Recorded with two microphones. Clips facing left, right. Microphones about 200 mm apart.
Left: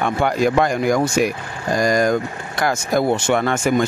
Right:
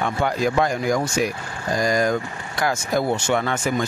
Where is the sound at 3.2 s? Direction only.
50° left (ahead or behind).